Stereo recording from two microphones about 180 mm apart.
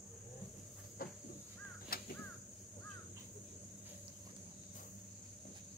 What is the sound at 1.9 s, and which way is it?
Crow, 55° left (ahead or behind).